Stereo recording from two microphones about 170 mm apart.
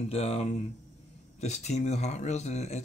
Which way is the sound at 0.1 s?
35° left (ahead or behind).